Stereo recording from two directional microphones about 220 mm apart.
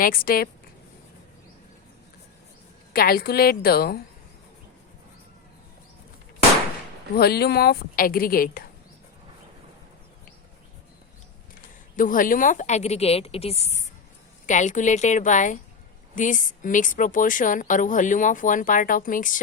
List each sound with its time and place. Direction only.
0.0 s a woman's voice: 40° left (ahead or behind)
2.9 s a woman's voice: 45° left (ahead or behind)
7.2 s a woman's voice: 45° left (ahead or behind)
11.9 s a woman's voice: 40° left (ahead or behind)